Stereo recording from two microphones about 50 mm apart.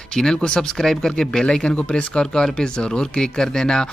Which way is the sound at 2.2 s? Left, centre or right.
Centre.